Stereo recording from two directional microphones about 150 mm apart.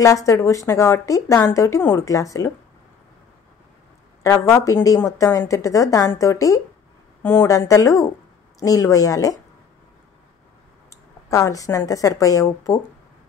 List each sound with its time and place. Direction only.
0.0 s speech: 20° left (ahead or behind)
4.5 s speech: 20° left (ahead or behind)
10.9 s speech: 20° left (ahead or behind)